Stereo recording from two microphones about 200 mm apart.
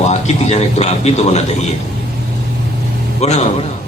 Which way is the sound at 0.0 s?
35° left (ahead or behind).